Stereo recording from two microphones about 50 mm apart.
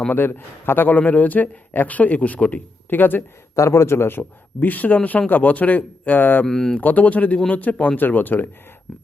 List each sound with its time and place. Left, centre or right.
0.1 s a man's voice: left
3.5 s speech: left
4.2 s a man's voice: left
6.4 s speech: centre
6.7 s a man's voice: left